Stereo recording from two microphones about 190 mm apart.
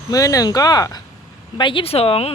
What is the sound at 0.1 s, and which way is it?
Speech, 20° left (ahead or behind).